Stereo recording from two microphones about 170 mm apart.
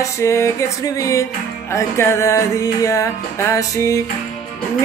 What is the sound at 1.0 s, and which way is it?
Music, 20° left (ahead or behind).